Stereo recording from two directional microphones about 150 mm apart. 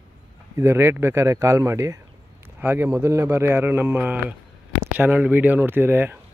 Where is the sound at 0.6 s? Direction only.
15° right (ahead or behind).